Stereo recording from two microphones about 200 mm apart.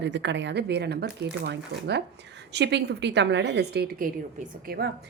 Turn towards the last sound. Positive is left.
turn(degrees=-55)  # may be behind; listen again after turning